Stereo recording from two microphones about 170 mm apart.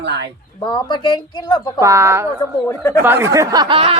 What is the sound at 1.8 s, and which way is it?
Speech, 15° right (ahead or behind).